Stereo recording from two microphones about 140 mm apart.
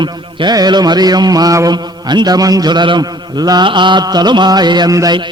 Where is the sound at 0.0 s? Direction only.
35° right (ahead or behind).